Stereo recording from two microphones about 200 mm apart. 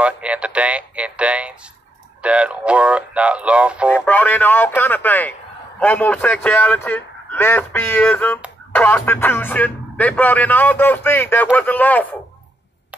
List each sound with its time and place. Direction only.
0.0 s speech: 5° right (ahead or behind)
4.0 s speech: 10° left (ahead or behind)